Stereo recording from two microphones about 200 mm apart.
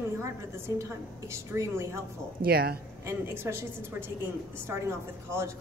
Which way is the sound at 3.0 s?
15° right (ahead or behind).